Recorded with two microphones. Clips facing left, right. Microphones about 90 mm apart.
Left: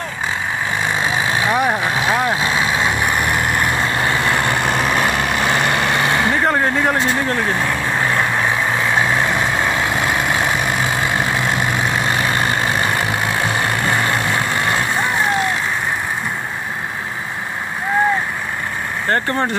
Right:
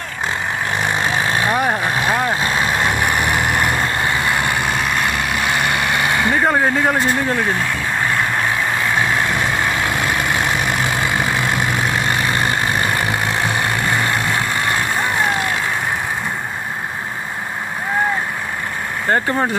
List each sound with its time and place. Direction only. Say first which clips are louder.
1.0 s vehicle: left 1 dB; 10° left (ahead or behind)
2.8 s vehicle: even; 5° right (ahead or behind)
3.7 s vehicle: even; 10° left (ahead or behind)
4.0 s vehicle: left 1 dB; 30° left (ahead or behind)
4.7 s vehicle: left 2 dB; centre (ahead or behind)
5.7 s vehicle: left 1 dB; 25° left (ahead or behind)
6.3 s speech: right 1 dB; 5° right (ahead or behind)
9.3 s vehicle: left 1 dB; 5° left (ahead or behind)
19.0 s speech: right 1 dB; 10° right (ahead or behind)